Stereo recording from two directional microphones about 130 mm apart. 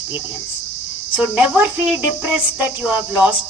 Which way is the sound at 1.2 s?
10° right (ahead or behind).